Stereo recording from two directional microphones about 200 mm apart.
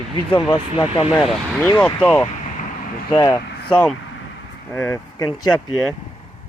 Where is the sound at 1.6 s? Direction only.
10° left (ahead or behind).